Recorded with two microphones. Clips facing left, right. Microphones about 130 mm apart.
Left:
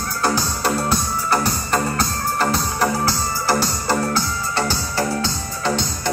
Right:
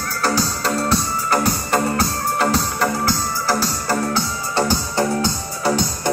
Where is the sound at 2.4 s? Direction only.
Centre (ahead or behind).